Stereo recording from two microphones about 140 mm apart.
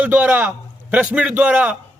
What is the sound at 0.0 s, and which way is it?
A man's voice, 10° right (ahead or behind).